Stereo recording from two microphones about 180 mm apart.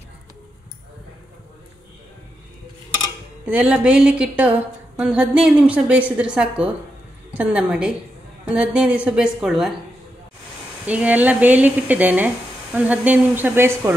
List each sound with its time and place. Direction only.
3.4 s a woman's voice: 10° right (ahead or behind)
10.9 s speech: 10° right (ahead or behind)